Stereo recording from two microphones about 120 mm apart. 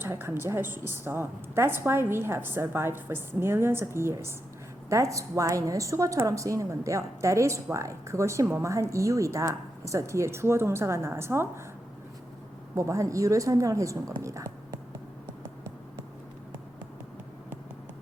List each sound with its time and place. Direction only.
0.0 s a woman's voice: 20° right (ahead or behind)
12.7 s a woman's voice: 25° right (ahead or behind)